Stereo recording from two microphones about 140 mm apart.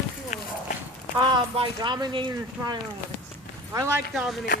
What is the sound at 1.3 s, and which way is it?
Speech, 35° right (ahead or behind).